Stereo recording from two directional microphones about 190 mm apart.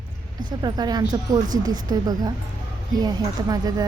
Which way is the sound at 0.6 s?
20° right (ahead or behind).